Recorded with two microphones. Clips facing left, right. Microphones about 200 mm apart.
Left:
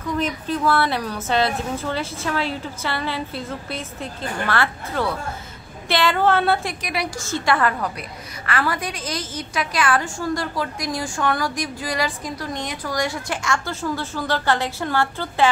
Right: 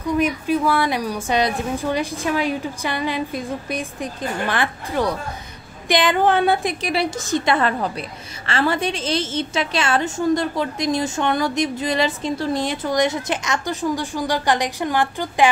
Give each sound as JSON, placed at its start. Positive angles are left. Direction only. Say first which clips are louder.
{"t": 0.0, "sound": "a woman's voice", "louder": "right 4 dB", "side_deg": -10}
{"t": 6.8, "sound": "a woman's voice", "louder": "right 5 dB", "side_deg": -30}